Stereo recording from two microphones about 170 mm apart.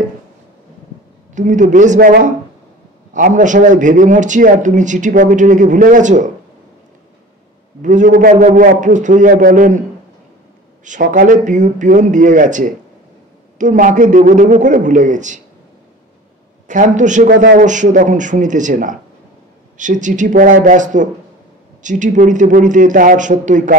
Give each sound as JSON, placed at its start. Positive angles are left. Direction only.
{"t": 1.3, "sound": "a man's voice", "side_deg": -50}
{"t": 2.0, "sound": "a man's voice", "side_deg": -55}
{"t": 7.8, "sound": "a man's voice", "side_deg": -50}
{"t": 10.8, "sound": "a man's voice", "side_deg": -50}
{"t": 16.6, "sound": "a man's voice", "side_deg": -50}